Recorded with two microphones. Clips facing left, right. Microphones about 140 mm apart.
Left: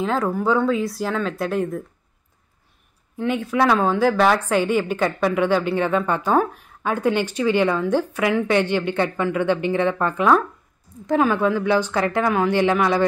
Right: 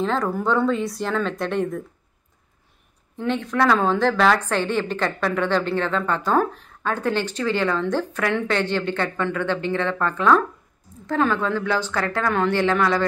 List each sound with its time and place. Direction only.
0.0 s speech: 5° left (ahead or behind)
3.2 s a woman's voice: 5° left (ahead or behind)